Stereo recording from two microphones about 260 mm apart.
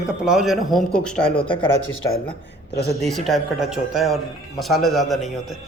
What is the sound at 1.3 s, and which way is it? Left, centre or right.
Speech, centre.